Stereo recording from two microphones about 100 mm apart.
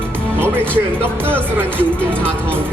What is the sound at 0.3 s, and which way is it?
Music, 20° right (ahead or behind).